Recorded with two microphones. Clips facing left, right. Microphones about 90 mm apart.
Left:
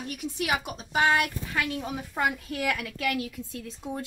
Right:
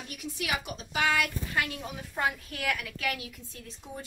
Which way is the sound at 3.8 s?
60° left (ahead or behind).